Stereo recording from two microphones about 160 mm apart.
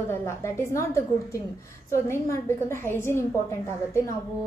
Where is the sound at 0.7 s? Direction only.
20° left (ahead or behind).